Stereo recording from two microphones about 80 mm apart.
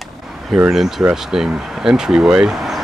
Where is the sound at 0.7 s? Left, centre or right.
Centre.